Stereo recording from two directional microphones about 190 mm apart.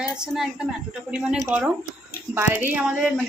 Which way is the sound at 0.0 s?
5° right (ahead or behind).